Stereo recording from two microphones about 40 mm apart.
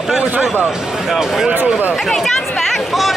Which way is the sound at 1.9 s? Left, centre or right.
Centre.